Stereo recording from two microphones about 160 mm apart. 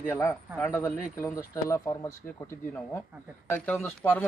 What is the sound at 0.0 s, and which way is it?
Speech, 15° left (ahead or behind).